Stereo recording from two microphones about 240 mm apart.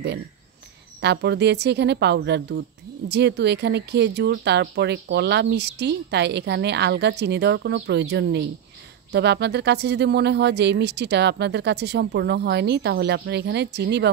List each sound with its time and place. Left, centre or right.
1.0 s speech: right